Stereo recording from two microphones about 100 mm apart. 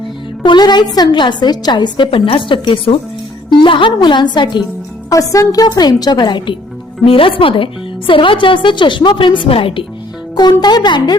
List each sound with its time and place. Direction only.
0.4 s a woman's voice: 45° left (ahead or behind)
2.0 s a woman's voice: 65° left (ahead or behind); by 4.6 s 50° left (ahead or behind)
5.0 s speech: 35° left (ahead or behind); by 6.6 s 50° left (ahead or behind)
7.0 s a woman's voice: 65° left (ahead or behind)
10.6 s a woman's voice: 45° left (ahead or behind)